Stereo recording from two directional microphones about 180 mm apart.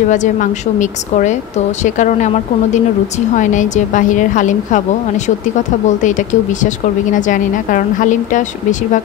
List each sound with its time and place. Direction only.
0.1 s a woman's voice: 45° left (ahead or behind)